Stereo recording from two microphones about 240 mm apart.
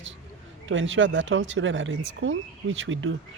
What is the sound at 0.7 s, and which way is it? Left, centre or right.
Speech, right.